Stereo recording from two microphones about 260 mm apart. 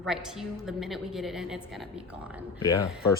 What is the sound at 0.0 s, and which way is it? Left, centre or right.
A woman's voice, centre.